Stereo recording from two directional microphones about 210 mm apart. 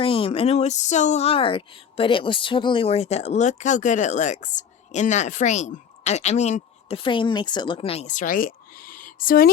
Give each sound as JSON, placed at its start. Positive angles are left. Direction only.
{"t": 0.0, "sound": "speech", "side_deg": 25}